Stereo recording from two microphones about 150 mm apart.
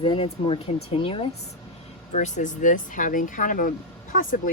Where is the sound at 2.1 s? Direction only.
55° left (ahead or behind).